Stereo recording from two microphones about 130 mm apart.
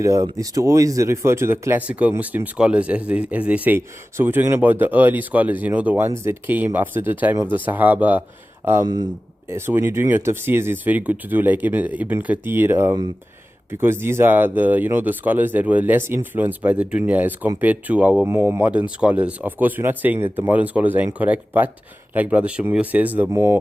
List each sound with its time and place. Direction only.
0.0 s speech: 25° right (ahead or behind)